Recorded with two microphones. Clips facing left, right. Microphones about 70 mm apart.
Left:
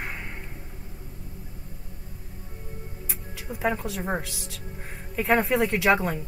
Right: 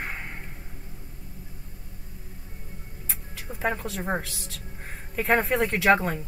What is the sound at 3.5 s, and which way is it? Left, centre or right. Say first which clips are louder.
Music: left 3 dB; centre.